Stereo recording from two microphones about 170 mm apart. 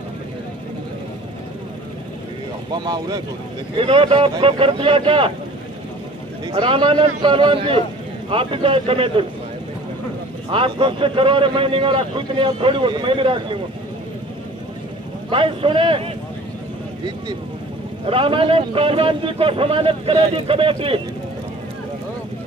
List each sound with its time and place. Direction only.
2.7 s a man's voice: 25° right (ahead or behind)
6.4 s a man's voice: 30° right (ahead or behind)
10.5 s a man's voice: 30° right (ahead or behind)
15.2 s a man's voice: 30° right (ahead or behind)
18.0 s a man's voice: 30° right (ahead or behind)